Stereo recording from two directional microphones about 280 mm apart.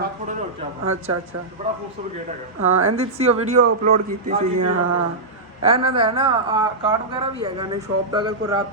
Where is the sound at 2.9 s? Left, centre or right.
Right.